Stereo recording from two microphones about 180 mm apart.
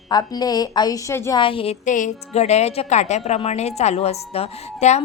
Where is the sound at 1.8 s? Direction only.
45° left (ahead or behind).